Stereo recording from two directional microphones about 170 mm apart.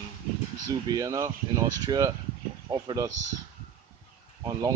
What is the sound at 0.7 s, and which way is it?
Speech, 20° right (ahead or behind).